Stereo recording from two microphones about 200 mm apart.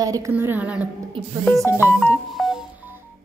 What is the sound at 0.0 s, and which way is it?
Speech, 15° right (ahead or behind).